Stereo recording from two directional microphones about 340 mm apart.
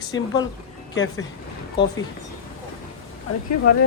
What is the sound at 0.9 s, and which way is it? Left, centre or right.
Speech, left.